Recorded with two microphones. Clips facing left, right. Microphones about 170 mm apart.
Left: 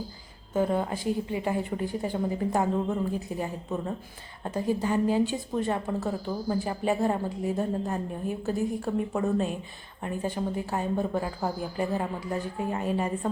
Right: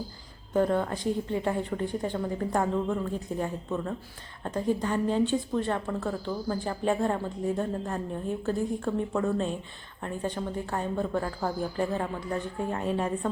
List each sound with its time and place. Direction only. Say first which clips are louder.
0.5 s a woman's voice: right 1 dB; 5° left (ahead or behind)
3.1 s a woman's voice: even; 10° left (ahead or behind)